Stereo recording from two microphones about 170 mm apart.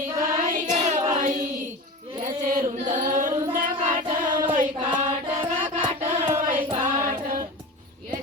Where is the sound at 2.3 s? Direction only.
50° right (ahead or behind).